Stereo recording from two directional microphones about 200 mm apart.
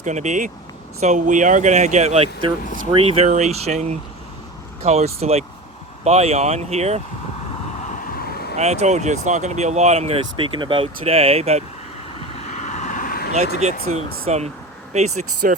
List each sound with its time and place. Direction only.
0.0 s speech: 35° right (ahead or behind)
8.2 s vehicle: 50° left (ahead or behind)
8.5 s speech: 35° right (ahead or behind)
12.3 s vehicle: 35° left (ahead or behind)
14.3 s speech: 35° right (ahead or behind)